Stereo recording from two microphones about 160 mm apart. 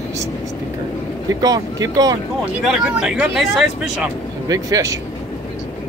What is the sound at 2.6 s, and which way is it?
Speech, 5° right (ahead or behind).